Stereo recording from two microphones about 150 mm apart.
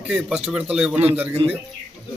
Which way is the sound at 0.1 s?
5° right (ahead or behind).